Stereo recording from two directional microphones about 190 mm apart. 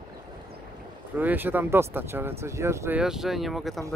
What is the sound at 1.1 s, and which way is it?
Speech, 10° right (ahead or behind).